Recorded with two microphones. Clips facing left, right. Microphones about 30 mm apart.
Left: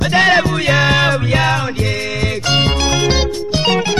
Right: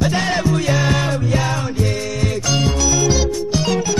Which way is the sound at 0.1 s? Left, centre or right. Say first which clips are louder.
Left 6 dB; left.